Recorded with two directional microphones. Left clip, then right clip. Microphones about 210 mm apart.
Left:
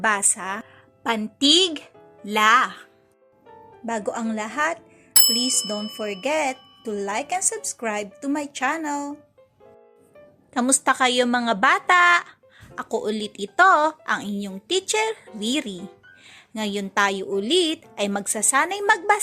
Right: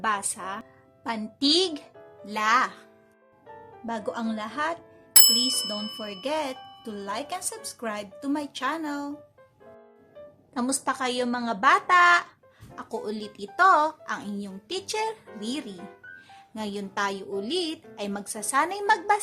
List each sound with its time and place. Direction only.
0.0 s a woman's voice: 20° left (ahead or behind)
3.8 s a woman's voice: 20° left (ahead or behind)
5.2 s bicycle bell: centre (ahead or behind)
6.0 s a woman's voice: 20° left (ahead or behind)
10.5 s a woman's voice: 25° left (ahead or behind)